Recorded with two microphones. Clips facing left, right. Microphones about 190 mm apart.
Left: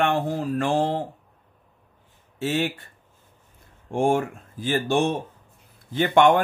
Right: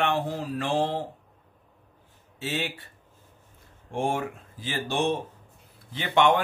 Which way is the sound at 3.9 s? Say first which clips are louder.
Left 6 dB; 50° left (ahead or behind).